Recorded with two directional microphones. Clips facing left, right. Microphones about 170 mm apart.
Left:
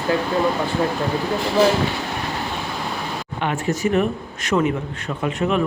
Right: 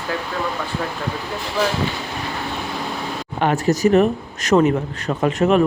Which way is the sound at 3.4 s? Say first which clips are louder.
Right 5 dB; 40° right (ahead or behind).